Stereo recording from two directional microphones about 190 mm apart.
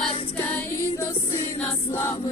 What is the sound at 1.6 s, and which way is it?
Music, 10° left (ahead or behind).